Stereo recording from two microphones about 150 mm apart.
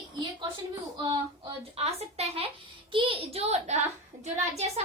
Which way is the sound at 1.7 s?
45° right (ahead or behind).